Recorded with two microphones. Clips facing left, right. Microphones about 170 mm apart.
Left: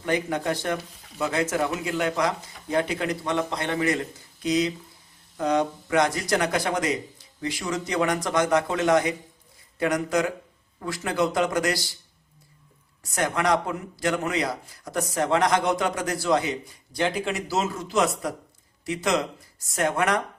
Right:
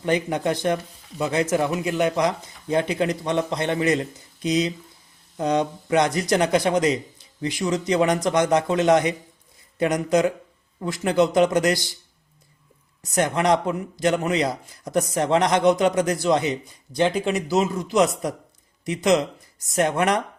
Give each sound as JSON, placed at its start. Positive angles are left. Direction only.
{"t": 0.0, "sound": "a man's voice", "side_deg": -20}
{"t": 13.0, "sound": "a man's voice", "side_deg": -20}